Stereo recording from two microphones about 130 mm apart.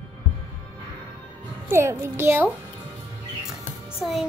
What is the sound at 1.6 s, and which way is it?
Speech, 20° right (ahead or behind).